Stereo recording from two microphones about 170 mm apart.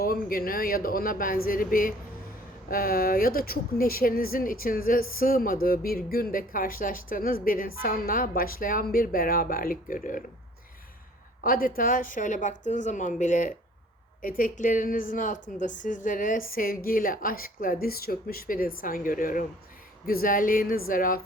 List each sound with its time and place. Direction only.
0.0 s speech: 60° left (ahead or behind)
11.4 s a woman's voice: 55° left (ahead or behind)